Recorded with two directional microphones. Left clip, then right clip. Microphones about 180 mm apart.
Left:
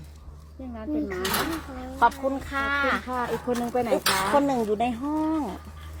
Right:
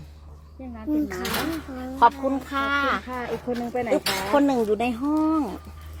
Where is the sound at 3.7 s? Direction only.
5° left (ahead or behind).